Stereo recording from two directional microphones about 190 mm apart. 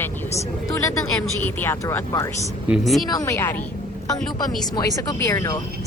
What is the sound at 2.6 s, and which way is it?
Speech, centre (ahead or behind).